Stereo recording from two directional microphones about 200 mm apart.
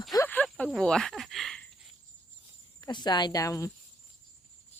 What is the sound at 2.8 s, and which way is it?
Speech, 20° left (ahead or behind).